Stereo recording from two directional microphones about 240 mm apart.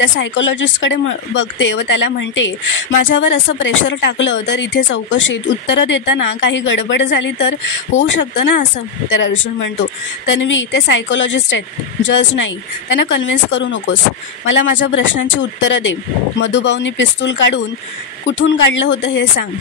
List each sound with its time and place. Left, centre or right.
0.0 s speech: left
10.2 s speech: left